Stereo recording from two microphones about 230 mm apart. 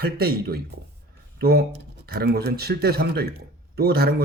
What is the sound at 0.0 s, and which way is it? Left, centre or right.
Speech, right.